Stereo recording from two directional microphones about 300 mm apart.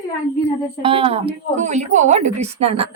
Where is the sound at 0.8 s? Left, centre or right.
Centre.